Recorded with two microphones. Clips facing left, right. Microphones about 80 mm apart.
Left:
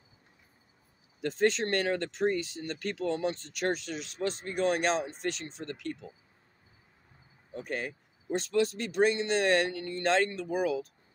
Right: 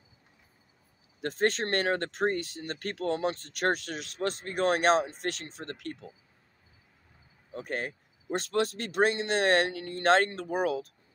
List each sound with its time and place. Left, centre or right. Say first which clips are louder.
1.2 s speech: left 1 dB; right
7.5 s speech: right 1 dB; right